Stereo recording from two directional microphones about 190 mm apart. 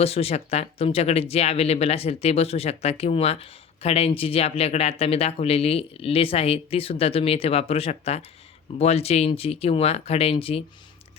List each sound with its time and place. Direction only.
0.0 s speech: 30° left (ahead or behind)